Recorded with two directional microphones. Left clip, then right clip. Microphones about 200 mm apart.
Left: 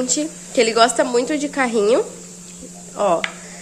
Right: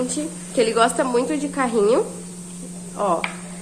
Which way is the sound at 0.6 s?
25° left (ahead or behind).